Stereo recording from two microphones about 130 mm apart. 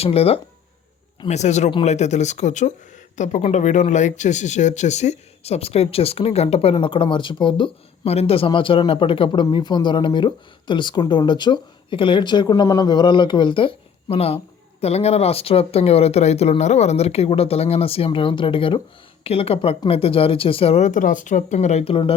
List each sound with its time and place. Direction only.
0.0 s speech: 50° left (ahead or behind)
1.3 s speech: 60° left (ahead or behind)
6.7 s speech: 40° left (ahead or behind)